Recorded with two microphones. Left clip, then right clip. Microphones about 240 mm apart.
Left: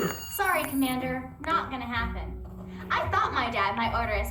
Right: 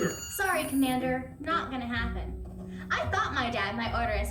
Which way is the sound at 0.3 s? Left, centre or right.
Centre.